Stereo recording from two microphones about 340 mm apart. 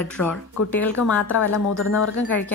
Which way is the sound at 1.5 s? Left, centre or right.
Left.